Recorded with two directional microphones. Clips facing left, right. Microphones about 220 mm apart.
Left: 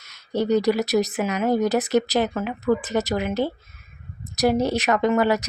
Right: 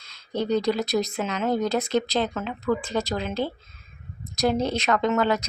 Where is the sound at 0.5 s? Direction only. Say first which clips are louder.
Left 3 dB; 15° left (ahead or behind).